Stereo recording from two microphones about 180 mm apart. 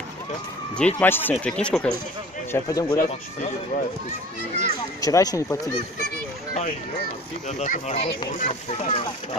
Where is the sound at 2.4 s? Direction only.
15° left (ahead or behind).